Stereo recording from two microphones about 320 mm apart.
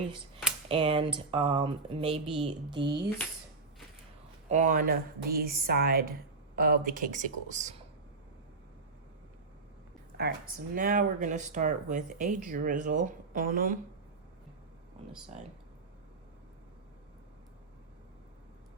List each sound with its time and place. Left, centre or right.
0.7 s speech: centre
4.4 s speech: right
10.8 s speech: right